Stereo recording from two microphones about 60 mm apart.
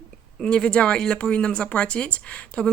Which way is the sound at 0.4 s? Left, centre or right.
Centre.